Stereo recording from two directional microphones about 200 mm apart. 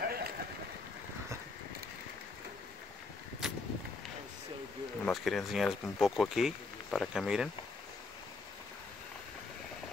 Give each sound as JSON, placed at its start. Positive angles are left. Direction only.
{"t": 0.0, "sound": "vehicle", "side_deg": -50}
{"t": 5.0, "sound": "speech", "side_deg": 0}